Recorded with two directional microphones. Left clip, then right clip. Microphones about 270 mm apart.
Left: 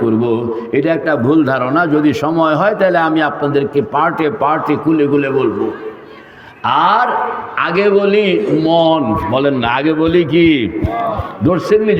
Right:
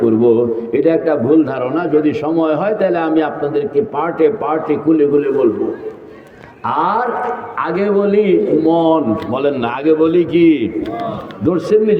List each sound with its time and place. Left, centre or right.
0.2 s a man's voice: left
6.7 s a man's voice: left